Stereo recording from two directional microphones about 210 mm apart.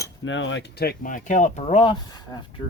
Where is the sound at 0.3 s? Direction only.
60° left (ahead or behind); by 2.4 s 20° left (ahead or behind).